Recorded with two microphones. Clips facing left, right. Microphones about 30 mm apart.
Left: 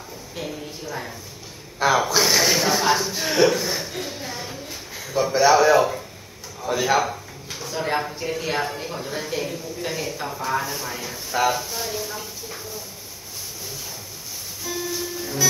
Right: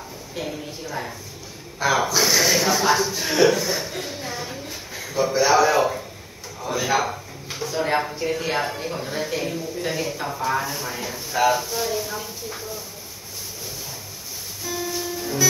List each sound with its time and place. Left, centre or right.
0.4 s speech: centre
2.0 s speech: centre
3.2 s a sound: centre
5.3 s speech: centre
14.7 s music: centre